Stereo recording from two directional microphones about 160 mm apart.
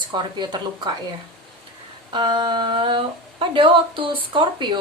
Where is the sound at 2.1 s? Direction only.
30° right (ahead or behind).